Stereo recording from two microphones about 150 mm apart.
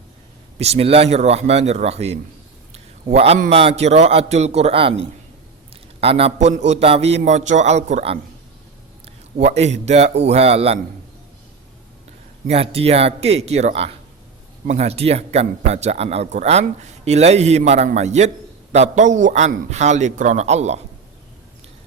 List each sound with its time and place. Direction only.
0.6 s a man's voice: 40° right (ahead or behind)
2.7 s a sound: 45° right (ahead or behind)
3.5 s a man's voice: 40° right (ahead or behind)
9.4 s a man's voice: 45° right (ahead or behind)
12.5 s a man's voice: 45° right (ahead or behind)